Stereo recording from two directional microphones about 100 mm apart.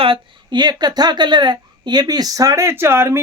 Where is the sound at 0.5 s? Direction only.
45° right (ahead or behind).